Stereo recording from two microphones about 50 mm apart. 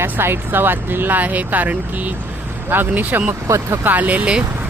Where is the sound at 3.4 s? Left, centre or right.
Right.